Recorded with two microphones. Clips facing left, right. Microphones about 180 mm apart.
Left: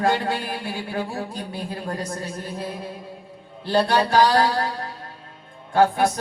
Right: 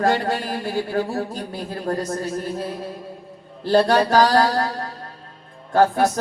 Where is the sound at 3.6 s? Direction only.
40° right (ahead or behind).